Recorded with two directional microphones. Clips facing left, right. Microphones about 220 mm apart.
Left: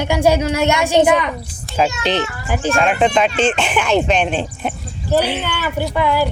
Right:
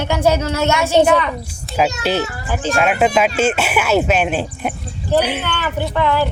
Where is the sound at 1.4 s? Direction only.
5° right (ahead or behind).